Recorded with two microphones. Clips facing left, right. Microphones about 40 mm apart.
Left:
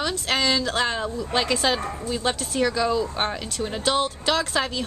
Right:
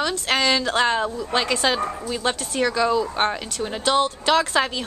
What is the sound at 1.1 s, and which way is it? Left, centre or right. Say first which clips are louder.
A woman's voice: right 1 dB; centre.